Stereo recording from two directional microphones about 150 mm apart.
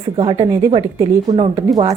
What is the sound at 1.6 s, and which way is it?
Speech, 25° right (ahead or behind).